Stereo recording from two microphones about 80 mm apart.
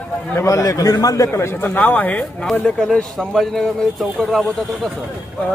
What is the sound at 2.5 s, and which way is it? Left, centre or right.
A man's voice, centre.